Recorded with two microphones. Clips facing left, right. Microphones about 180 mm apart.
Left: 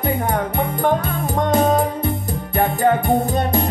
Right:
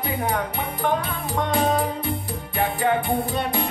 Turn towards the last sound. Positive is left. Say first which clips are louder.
# left 6 dB
turn(degrees=45)  # may be behind; listen again after turning